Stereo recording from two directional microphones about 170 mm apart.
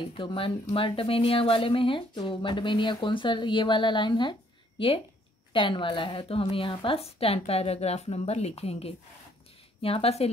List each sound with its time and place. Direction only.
0.1 s a woman's voice: 30° left (ahead or behind)